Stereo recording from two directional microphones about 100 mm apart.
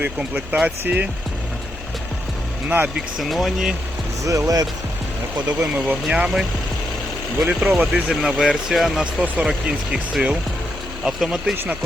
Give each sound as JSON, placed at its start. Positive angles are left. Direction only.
{"t": 0.0, "sound": "speech", "side_deg": -10}
{"t": 2.6, "sound": "speech", "side_deg": -15}
{"t": 3.2, "sound": "speech", "side_deg": 0}
{"t": 4.3, "sound": "speech", "side_deg": -35}
{"t": 5.9, "sound": "speech", "side_deg": -5}
{"t": 9.2, "sound": "speech", "side_deg": -15}
{"t": 11.5, "sound": "speech", "side_deg": -20}